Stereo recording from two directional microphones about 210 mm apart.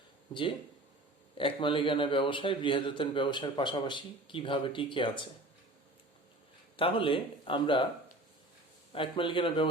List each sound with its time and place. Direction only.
1.4 s a man's voice: 25° left (ahead or behind)
6.7 s a man's voice: 25° left (ahead or behind)
8.9 s a man's voice: 25° left (ahead or behind)